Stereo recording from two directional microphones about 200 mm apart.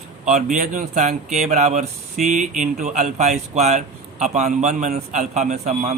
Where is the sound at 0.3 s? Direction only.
35° right (ahead or behind).